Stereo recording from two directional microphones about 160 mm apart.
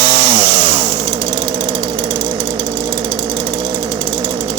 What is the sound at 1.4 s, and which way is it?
Engine, 90° right.